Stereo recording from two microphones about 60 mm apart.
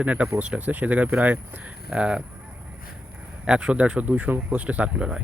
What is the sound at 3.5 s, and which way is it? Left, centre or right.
Speech, centre.